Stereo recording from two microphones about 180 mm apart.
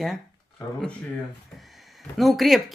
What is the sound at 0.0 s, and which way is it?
Speech, centre (ahead or behind).